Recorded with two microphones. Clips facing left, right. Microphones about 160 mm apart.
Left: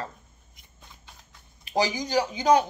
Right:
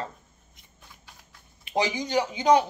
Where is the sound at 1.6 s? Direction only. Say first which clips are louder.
Left 1 dB; 35° left (ahead or behind).